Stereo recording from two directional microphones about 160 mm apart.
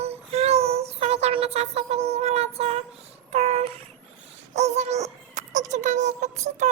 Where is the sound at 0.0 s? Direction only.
40° right (ahead or behind).